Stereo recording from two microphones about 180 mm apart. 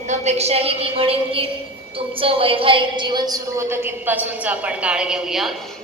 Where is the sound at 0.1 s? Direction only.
35° right (ahead or behind); by 5.5 s centre (ahead or behind).